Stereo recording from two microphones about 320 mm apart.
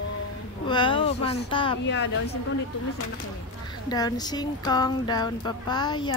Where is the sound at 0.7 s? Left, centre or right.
Centre.